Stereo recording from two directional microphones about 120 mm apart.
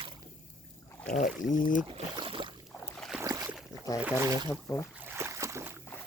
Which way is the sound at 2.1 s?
45° right (ahead or behind).